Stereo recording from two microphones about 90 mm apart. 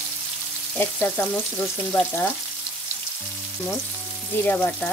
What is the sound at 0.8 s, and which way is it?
Frying, 20° left (ahead or behind).